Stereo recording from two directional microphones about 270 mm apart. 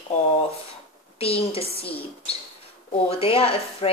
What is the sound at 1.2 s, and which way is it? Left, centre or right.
Speech, left.